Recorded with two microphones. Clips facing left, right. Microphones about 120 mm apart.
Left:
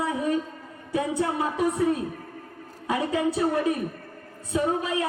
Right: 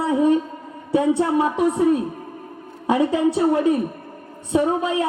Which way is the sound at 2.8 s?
30° right (ahead or behind).